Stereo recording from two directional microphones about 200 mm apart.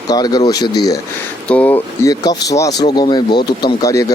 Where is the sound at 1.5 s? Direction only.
10° left (ahead or behind).